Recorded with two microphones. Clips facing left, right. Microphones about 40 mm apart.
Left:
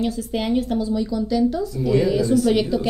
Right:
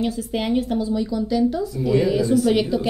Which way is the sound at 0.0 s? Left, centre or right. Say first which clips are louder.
Even; centre.